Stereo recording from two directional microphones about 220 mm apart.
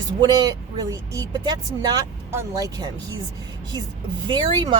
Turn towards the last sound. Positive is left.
turn(degrees=-20)  # may be behind; listen again after turning